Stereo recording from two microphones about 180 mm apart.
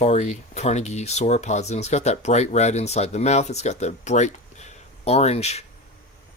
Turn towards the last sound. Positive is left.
turn(degrees=35)  # may be behind; listen again after turning